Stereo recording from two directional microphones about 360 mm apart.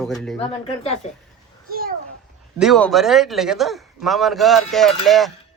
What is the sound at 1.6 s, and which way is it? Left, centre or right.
Speech, right.